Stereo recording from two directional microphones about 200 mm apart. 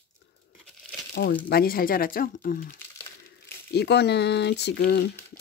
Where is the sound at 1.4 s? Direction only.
50° left (ahead or behind).